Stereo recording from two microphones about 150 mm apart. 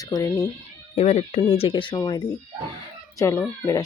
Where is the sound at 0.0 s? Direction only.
20° left (ahead or behind).